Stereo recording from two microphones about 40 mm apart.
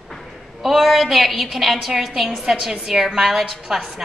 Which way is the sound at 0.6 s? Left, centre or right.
Centre.